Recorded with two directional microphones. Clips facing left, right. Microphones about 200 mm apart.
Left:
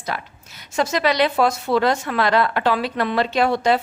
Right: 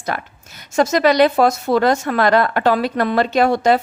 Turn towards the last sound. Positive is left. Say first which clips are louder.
# right 4 dB
turn(degrees=-45)  # may be behind; listen again after turning